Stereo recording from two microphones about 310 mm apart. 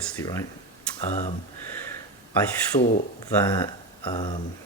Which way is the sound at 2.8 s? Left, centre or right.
Left.